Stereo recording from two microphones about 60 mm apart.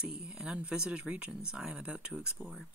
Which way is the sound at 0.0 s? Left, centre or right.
Centre.